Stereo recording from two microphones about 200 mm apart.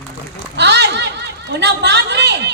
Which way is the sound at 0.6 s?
60° right (ahead or behind).